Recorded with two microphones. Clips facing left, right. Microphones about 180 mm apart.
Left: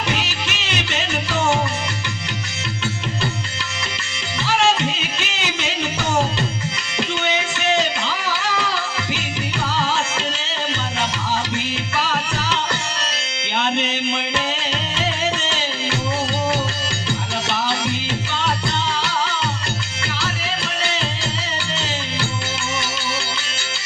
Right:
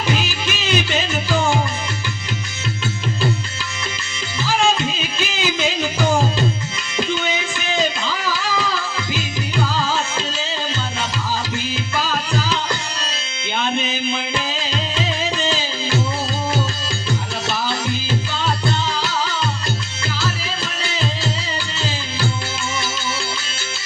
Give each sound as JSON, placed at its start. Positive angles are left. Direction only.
{"t": 0.1, "sound": "music", "side_deg": 70}
{"t": 4.4, "sound": "music", "side_deg": 70}
{"t": 7.1, "sound": "a sound", "side_deg": 70}
{"t": 11.9, "sound": "tabla", "side_deg": 70}
{"t": 13.6, "sound": "music", "side_deg": 70}